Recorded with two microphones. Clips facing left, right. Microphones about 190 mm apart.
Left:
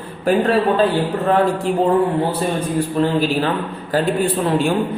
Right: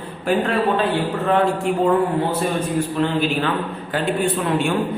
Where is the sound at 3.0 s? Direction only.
35° left (ahead or behind).